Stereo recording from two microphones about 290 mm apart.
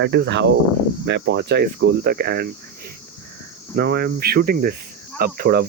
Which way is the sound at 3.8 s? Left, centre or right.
Right.